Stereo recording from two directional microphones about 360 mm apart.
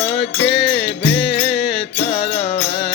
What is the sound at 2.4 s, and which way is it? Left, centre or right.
Music, left.